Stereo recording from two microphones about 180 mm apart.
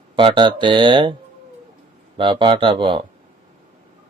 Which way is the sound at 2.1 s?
25° right (ahead or behind).